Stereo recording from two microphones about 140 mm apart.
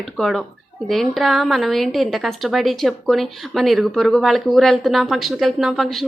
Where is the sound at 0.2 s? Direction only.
Centre (ahead or behind).